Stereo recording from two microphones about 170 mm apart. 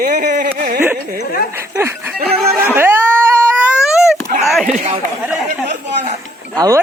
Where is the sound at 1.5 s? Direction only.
15° right (ahead or behind).